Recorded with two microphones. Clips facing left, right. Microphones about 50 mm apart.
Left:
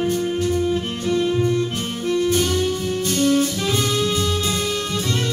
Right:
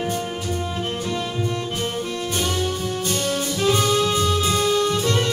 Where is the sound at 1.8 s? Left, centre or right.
Centre.